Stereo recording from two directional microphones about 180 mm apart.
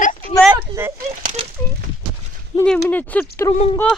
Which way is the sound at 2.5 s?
30° left (ahead or behind).